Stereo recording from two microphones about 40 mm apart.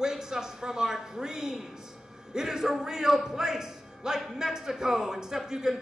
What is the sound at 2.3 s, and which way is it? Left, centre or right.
A man's voice, centre.